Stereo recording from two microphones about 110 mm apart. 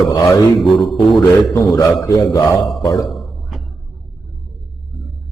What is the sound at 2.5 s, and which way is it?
Speech, centre (ahead or behind).